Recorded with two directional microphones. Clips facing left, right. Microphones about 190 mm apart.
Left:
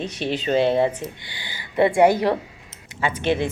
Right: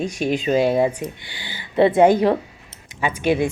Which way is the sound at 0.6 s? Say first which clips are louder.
Even; 25° left (ahead or behind).